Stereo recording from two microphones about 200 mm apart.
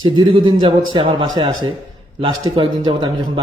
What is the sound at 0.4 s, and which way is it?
A man's voice, 20° right (ahead or behind).